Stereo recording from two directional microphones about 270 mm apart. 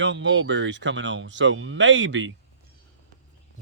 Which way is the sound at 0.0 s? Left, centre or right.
Right.